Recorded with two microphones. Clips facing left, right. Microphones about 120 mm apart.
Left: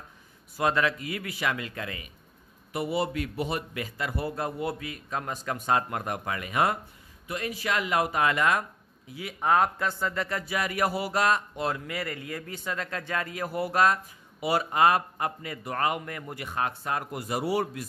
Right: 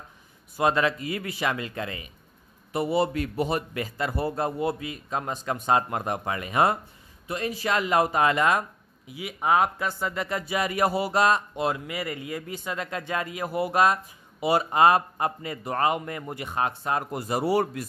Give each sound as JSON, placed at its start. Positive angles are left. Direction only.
{"t": 0.6, "sound": "a man's voice", "side_deg": -25}
{"t": 9.0, "sound": "a man's voice", "side_deg": -10}